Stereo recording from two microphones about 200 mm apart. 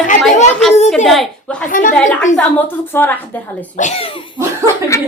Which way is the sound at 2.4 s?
10° left (ahead or behind).